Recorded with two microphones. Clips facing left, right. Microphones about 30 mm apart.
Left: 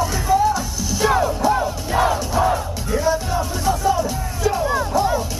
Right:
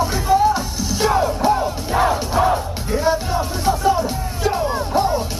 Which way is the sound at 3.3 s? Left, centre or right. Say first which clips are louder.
Right 1 dB; right.